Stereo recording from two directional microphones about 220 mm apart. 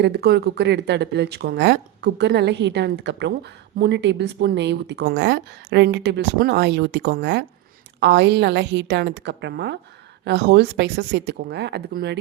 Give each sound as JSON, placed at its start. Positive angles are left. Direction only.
{"t": 0.0, "sound": "a woman's voice", "side_deg": -50}